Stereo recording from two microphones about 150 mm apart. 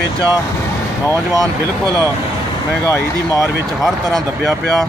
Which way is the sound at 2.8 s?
20° left (ahead or behind).